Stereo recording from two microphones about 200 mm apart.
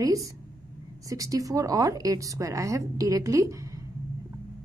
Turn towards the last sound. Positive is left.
turn(degrees=-15)  # may be behind; listen again after turning